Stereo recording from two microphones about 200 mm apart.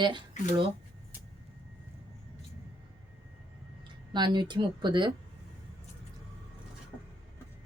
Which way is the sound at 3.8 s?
20° right (ahead or behind).